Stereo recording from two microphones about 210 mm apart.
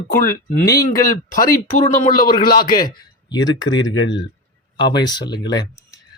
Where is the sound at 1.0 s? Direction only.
40° left (ahead or behind).